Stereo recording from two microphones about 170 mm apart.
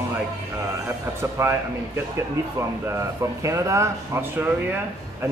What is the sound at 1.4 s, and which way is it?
Speech, 15° right (ahead or behind).